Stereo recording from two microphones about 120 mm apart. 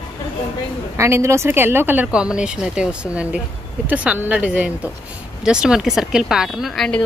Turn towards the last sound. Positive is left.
turn(degrees=5)  # may be behind; listen again after turning